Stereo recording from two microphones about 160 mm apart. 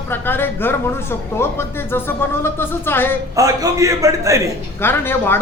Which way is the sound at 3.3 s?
20° right (ahead or behind).